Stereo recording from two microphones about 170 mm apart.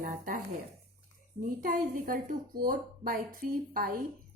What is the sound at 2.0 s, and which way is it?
A woman's voice, 55° right (ahead or behind).